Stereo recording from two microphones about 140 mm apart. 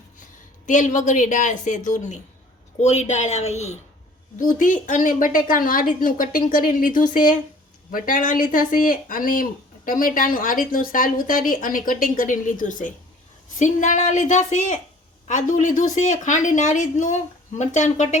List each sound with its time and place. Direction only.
0.6 s speech: 65° left (ahead or behind)
4.4 s speech: 70° left (ahead or behind)